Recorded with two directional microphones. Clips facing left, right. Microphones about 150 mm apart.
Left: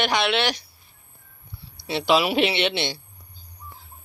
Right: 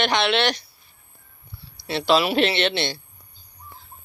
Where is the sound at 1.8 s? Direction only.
15° left (ahead or behind).